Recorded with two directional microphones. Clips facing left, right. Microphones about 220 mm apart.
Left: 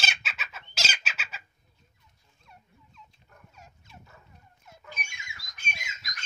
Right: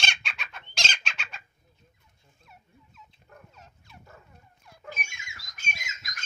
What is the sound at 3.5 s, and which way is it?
Fowl, 10° left (ahead or behind).